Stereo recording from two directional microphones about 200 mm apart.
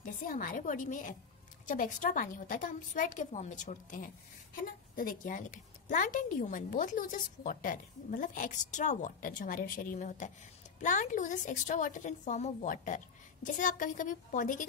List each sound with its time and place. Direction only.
0.0 s a woman's voice: 45° left (ahead or behind)